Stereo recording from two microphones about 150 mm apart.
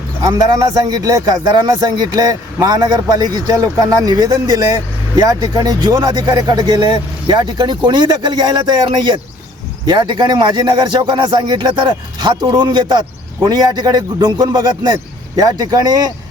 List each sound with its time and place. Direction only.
0.2 s a man's voice: 25° right (ahead or behind)